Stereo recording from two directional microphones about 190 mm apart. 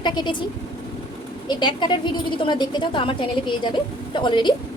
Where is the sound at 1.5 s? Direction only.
25° left (ahead or behind).